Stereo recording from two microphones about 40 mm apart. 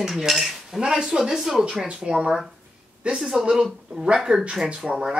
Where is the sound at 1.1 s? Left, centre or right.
Centre.